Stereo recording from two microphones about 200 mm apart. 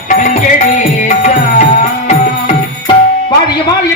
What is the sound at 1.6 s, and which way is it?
Music, 35° left (ahead or behind).